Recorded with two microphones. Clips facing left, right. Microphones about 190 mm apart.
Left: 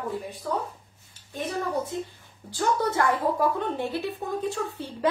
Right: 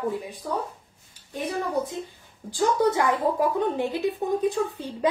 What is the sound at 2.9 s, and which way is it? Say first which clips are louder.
A woman's voice: right 2 dB; 15° right (ahead or behind).